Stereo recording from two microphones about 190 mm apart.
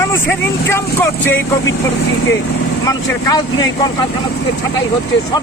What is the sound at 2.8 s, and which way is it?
Speech, 20° left (ahead or behind).